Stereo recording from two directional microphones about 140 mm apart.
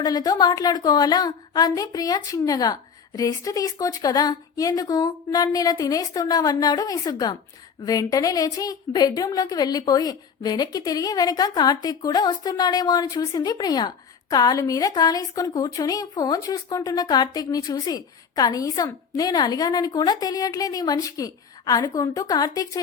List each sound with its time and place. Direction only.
0.0 s a woman's voice: 25° left (ahead or behind)